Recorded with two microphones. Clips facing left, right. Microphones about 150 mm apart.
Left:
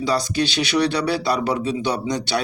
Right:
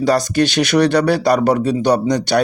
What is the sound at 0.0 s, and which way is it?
Speech, 65° right (ahead or behind).